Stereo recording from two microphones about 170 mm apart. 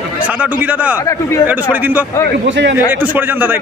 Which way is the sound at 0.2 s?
10° right (ahead or behind).